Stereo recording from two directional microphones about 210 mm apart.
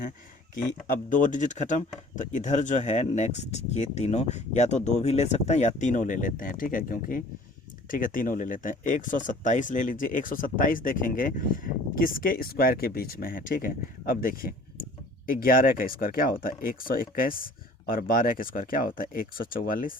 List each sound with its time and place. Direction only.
1.1 s speech: 35° left (ahead or behind)